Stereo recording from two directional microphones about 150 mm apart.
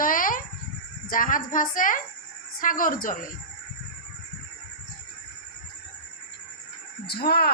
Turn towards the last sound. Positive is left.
turn(degrees=90)